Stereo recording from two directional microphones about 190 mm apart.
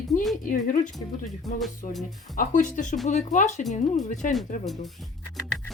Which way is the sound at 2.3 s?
45° left (ahead or behind).